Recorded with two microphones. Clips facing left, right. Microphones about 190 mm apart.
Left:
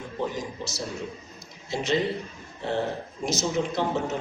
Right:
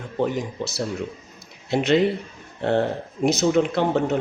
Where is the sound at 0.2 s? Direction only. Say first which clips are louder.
Right 7 dB; 60° right (ahead or behind).